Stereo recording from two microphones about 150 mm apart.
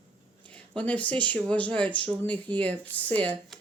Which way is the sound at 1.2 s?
10° left (ahead or behind).